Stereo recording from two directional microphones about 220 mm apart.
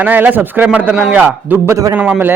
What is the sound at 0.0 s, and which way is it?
A man's voice, 10° right (ahead or behind).